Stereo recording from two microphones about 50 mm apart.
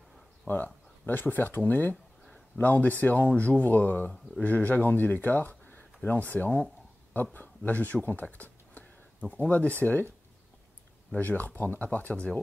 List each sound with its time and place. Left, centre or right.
0.5 s speech: left
1.0 s speech: left
2.2 s a sound: centre
2.6 s speech: left
11.1 s speech: left